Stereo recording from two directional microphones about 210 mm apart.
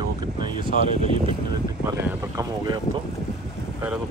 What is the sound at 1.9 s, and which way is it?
Speech, 15° right (ahead or behind).